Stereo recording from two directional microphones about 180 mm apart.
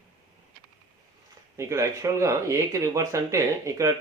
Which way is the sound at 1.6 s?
15° right (ahead or behind).